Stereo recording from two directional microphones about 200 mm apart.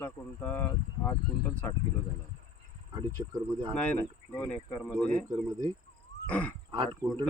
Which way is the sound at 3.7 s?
5° left (ahead or behind).